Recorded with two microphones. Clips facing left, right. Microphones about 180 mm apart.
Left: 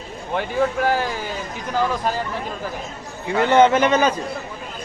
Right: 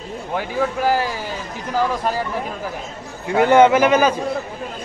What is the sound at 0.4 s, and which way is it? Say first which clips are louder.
Speech: left 1 dB; 5° right (ahead or behind).